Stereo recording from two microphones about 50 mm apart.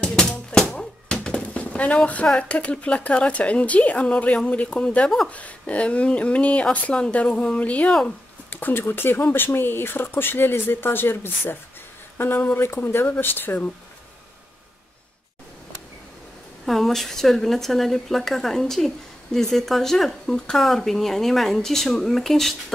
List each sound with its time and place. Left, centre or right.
0.0 s music: centre
0.6 s bouncing: centre
2.3 s speech: left
8.5 s speech: left
16.6 s speech: centre